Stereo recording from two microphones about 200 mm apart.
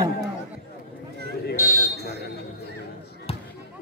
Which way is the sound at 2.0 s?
55° right (ahead or behind).